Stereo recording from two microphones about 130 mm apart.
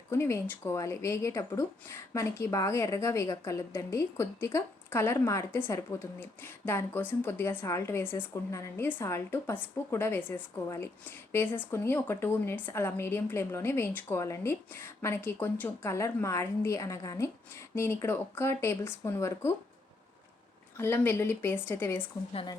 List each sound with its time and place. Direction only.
0.1 s a woman's voice: 20° left (ahead or behind)
20.7 s speech: 15° left (ahead or behind)